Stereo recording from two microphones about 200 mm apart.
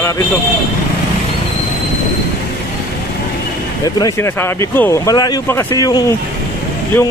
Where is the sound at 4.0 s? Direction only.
15° left (ahead or behind).